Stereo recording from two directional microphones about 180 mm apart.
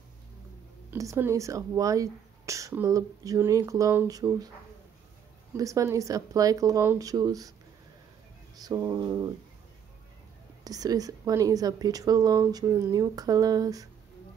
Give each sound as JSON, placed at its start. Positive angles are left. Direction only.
{"t": 0.8, "sound": "speech", "side_deg": -15}
{"t": 5.5, "sound": "a woman's voice", "side_deg": -20}
{"t": 8.5, "sound": "a woman's voice", "side_deg": -20}
{"t": 10.6, "sound": "a woman's voice", "side_deg": -20}